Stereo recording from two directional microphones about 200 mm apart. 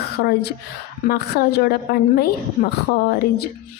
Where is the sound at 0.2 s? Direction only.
55° left (ahead or behind).